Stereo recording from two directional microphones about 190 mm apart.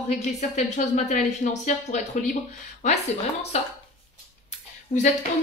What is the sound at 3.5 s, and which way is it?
Speech, 35° left (ahead or behind).